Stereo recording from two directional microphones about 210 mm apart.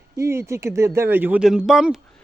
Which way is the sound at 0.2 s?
15° right (ahead or behind).